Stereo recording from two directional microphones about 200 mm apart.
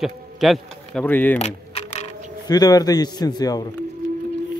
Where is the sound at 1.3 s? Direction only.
35° left (ahead or behind).